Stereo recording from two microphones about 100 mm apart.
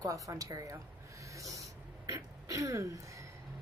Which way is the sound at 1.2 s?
35° right (ahead or behind).